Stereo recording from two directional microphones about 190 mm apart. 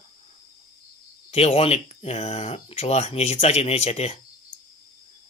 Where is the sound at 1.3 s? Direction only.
30° left (ahead or behind).